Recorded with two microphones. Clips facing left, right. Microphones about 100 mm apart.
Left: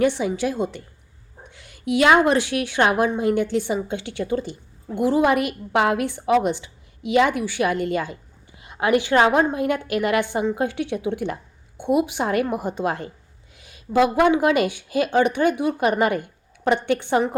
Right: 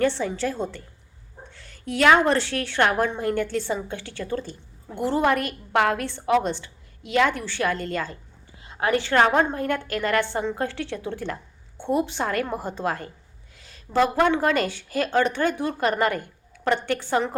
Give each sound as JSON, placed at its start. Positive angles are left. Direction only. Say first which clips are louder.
{"t": 0.0, "sound": "a woman's voice", "louder": "left 3 dB", "side_deg": 15}